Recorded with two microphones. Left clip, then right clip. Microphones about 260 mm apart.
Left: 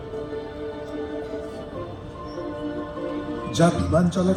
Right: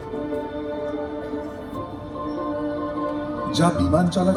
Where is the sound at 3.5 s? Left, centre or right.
Left.